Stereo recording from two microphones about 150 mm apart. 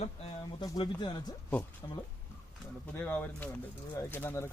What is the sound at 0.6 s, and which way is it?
Speech, 30° left (ahead or behind).